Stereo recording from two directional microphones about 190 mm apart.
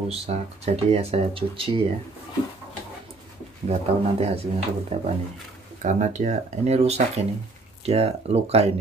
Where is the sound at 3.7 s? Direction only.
35° right (ahead or behind).